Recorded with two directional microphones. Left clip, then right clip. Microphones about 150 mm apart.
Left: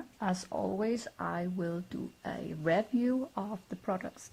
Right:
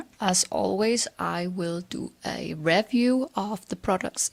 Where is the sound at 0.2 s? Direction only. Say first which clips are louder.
Right 10 dB; 45° right (ahead or behind).